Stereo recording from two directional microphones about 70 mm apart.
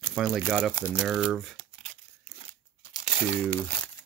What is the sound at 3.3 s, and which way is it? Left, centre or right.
Speech, centre.